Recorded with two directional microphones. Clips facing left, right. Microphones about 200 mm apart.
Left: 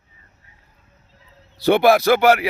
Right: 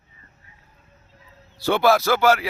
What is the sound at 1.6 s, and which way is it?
Speech, 15° left (ahead or behind).